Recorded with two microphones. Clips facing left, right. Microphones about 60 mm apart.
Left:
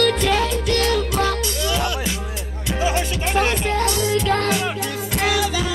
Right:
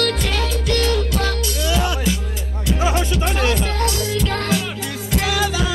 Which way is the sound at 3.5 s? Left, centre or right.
Left.